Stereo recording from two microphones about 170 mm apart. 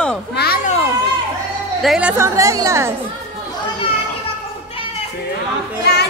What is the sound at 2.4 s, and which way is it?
Speech, 20° right (ahead or behind).